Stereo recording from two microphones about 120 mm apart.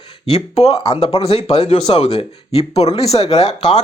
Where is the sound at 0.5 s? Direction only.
65° left (ahead or behind).